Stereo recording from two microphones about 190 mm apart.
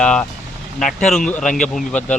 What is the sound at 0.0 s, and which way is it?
Vehicle, 5° left (ahead or behind).